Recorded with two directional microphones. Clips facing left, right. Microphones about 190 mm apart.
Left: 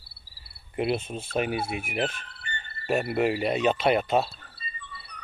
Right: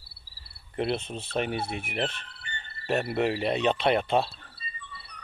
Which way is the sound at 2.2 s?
55° left (ahead or behind).